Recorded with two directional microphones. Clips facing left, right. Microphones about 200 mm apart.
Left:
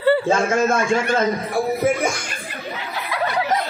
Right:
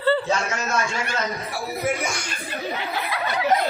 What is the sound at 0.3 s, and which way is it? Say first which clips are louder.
A man's voice: left 7 dB; 50° left (ahead or behind).